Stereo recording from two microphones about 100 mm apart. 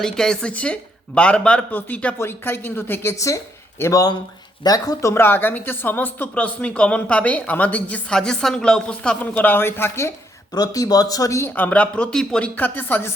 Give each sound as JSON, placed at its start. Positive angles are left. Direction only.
{"t": 0.0, "sound": "speech", "side_deg": 5}
{"t": 4.6, "sound": "speech", "side_deg": 40}
{"t": 5.1, "sound": "speech", "side_deg": 20}
{"t": 10.5, "sound": "speech", "side_deg": 40}
{"t": 12.5, "sound": "speech", "side_deg": 20}